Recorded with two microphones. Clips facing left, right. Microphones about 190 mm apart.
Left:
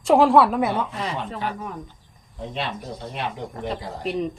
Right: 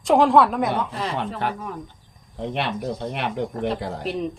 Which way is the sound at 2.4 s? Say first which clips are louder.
Right 4 dB; 60° right (ahead or behind).